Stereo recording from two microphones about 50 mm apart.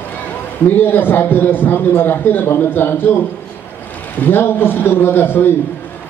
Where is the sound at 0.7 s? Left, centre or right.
Left.